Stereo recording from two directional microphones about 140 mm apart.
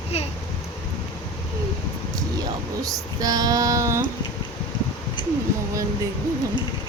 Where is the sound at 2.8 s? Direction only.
25° right (ahead or behind).